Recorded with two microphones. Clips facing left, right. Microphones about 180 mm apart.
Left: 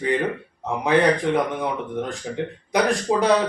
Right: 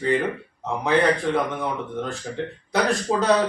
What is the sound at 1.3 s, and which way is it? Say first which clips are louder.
Speech: left 2 dB; 15° left (ahead or behind).